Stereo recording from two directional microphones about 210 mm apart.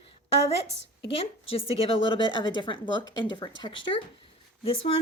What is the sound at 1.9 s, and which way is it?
Speech, 25° left (ahead or behind).